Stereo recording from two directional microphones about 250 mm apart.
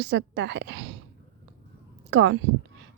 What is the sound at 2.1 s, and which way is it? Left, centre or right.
Speech, right.